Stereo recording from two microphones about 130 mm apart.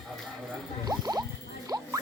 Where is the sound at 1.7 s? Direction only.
30° right (ahead or behind).